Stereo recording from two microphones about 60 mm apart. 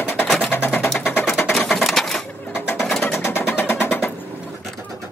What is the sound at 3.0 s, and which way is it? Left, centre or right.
Sewing machine, left.